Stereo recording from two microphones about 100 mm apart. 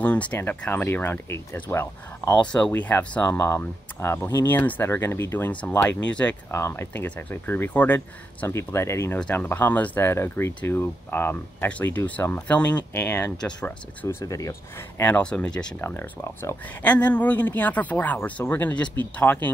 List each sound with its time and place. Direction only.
0.0 s speech: 15° left (ahead or behind)
2.4 s speech: 10° left (ahead or behind)
6.5 s speech: 25° left (ahead or behind)
8.5 s speech: 30° left (ahead or behind)
14.0 s speech: 35° left (ahead or behind)
15.0 s speech: 15° left (ahead or behind)
15.8 s speech: 20° left (ahead or behind)